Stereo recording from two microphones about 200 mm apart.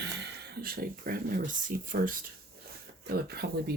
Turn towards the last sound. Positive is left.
turn(degrees=-50)  # may be behind; listen again after turning